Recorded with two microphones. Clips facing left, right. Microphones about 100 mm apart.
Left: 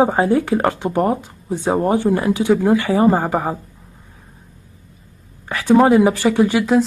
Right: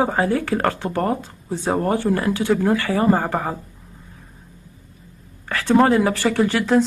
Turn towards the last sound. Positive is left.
turn(degrees=15)  # may be behind; listen again after turning